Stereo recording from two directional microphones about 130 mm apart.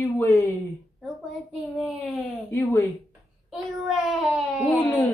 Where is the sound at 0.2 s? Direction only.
20° left (ahead or behind).